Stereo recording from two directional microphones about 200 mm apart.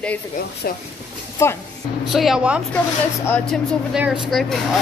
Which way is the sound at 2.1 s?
Centre (ahead or behind).